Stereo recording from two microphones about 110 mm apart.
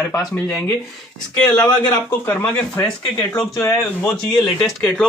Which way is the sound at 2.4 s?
10° left (ahead or behind).